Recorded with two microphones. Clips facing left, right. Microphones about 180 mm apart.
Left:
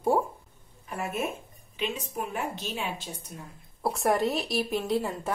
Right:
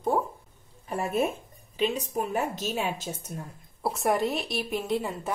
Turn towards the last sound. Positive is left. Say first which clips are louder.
# left 1 dB
turn(degrees=0)  # may be behind; listen again after turning